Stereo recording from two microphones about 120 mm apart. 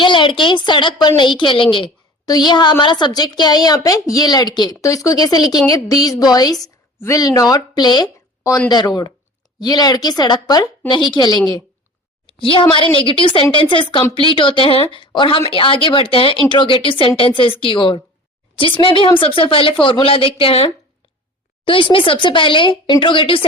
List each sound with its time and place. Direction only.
0.0 s a woman's voice: 45° left (ahead or behind)
2.2 s a woman's voice: 35° left (ahead or behind)
9.6 s a woman's voice: 35° left (ahead or behind)
12.4 s a woman's voice: 45° left (ahead or behind)